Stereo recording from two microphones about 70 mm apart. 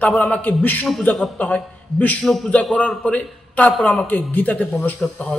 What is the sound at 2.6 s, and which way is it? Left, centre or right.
A man's voice, centre.